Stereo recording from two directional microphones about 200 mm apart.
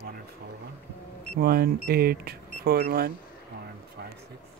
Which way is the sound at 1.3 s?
50° right (ahead or behind).